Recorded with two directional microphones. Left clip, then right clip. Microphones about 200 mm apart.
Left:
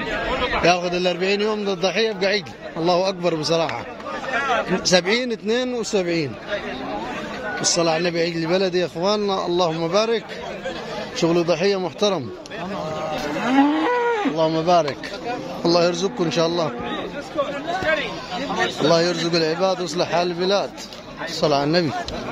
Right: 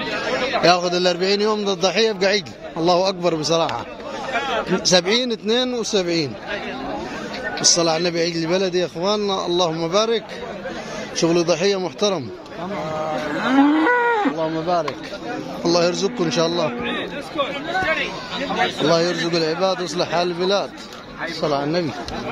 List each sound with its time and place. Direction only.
0.6 s a man's voice: 5° right (ahead or behind)
4.8 s a man's voice: 5° right (ahead or behind)
7.8 s a man's voice: centre (ahead or behind)
13.6 s cattle: 20° left (ahead or behind)
15.6 s a man's voice: 5° left (ahead or behind)
18.9 s a man's voice: 5° left (ahead or behind)
21.4 s a man's voice: 20° left (ahead or behind)